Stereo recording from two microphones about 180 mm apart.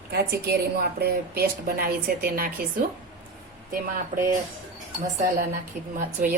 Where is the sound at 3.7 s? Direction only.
50° right (ahead or behind).